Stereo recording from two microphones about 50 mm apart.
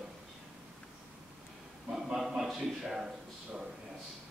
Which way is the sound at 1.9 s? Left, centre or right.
Centre.